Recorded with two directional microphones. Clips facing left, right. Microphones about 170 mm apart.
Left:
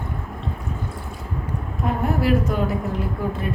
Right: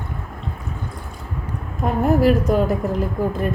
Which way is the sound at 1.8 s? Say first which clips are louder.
Right 3 dB; 40° right (ahead or behind).